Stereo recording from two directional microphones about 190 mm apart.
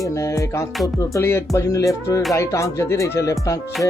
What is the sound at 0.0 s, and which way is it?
Speech, 15° left (ahead or behind).